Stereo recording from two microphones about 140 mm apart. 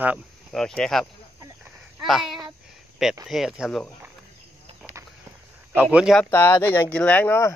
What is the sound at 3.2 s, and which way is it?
Speech, 5° right (ahead or behind).